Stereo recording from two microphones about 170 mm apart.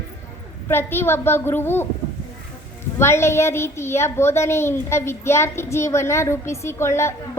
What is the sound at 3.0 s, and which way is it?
A child's voice, 15° left (ahead or behind).